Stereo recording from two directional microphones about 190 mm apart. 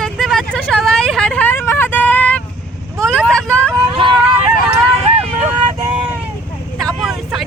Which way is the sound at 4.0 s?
30° right (ahead or behind).